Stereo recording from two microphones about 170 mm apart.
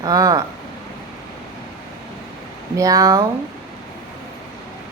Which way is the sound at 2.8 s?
20° right (ahead or behind).